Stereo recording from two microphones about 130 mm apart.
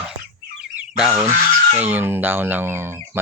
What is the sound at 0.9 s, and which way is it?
Speech, 5° right (ahead or behind).